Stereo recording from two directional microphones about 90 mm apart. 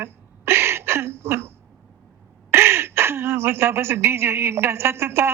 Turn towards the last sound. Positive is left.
turn(degrees=-30)  # may be behind; listen again after turning